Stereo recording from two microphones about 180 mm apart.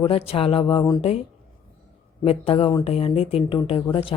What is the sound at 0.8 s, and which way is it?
Speech, 20° left (ahead or behind).